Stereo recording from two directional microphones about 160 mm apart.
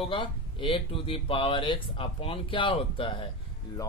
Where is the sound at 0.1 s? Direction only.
35° left (ahead or behind).